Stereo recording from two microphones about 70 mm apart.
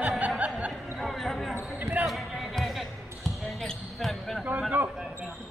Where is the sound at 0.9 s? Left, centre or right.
Centre.